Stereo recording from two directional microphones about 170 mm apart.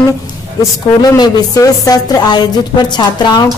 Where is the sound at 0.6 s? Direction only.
25° left (ahead or behind).